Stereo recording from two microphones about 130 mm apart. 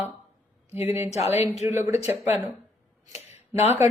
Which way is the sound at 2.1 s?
15° right (ahead or behind).